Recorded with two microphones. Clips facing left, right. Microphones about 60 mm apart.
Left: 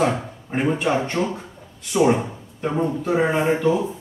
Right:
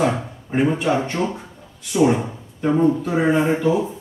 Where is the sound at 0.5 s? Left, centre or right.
Centre.